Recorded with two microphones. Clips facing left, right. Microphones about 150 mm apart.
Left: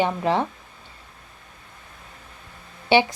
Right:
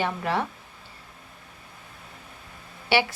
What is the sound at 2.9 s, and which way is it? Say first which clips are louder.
Speech: left 5 dB; 20° left (ahead or behind).